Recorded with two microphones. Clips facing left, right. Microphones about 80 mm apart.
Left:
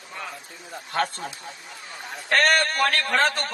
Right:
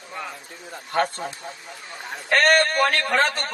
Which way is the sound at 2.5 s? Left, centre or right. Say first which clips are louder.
Right 3 dB; right.